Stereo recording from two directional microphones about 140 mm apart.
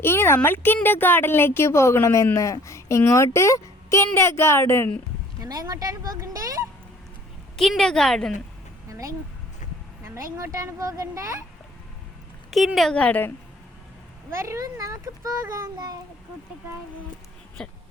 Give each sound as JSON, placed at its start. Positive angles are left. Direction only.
{"t": 0.0, "sound": "a woman's voice", "side_deg": 15}
{"t": 5.4, "sound": "a child's voice", "side_deg": -25}
{"t": 7.5, "sound": "a woman's voice", "side_deg": 0}
{"t": 8.9, "sound": "speech", "side_deg": -25}
{"t": 10.3, "sound": "a child's voice", "side_deg": -25}
{"t": 12.5, "sound": "a woman's voice", "side_deg": 0}
{"t": 14.3, "sound": "a child's voice", "side_deg": -20}
{"t": 17.6, "sound": "a woman's voice", "side_deg": 5}